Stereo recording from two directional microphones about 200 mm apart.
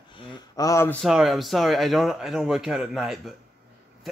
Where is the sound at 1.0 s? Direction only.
Centre (ahead or behind).